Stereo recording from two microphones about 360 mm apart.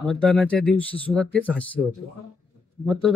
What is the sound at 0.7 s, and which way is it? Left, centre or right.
Speech, centre.